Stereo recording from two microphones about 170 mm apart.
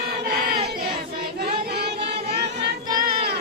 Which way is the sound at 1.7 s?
70° right (ahead or behind).